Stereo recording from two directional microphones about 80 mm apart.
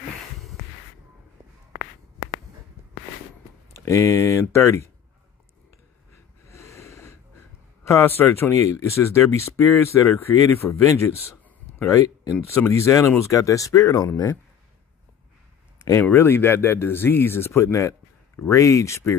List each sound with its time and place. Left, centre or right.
3.7 s speech: left
6.4 s snort: left
7.8 s speech: left
16.1 s speech: left